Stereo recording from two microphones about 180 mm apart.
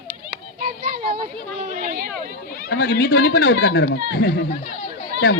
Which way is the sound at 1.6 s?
45° right (ahead or behind).